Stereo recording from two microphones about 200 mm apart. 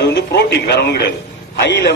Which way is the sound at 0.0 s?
55° left (ahead or behind).